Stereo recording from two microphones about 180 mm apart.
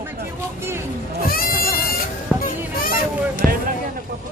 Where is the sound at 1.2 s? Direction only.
55° left (ahead or behind).